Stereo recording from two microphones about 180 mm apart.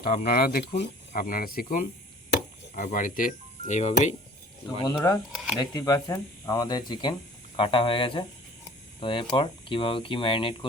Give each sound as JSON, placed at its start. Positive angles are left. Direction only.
{"t": 0.0, "sound": "speech", "side_deg": 55}
{"t": 4.8, "sound": "speech", "side_deg": 20}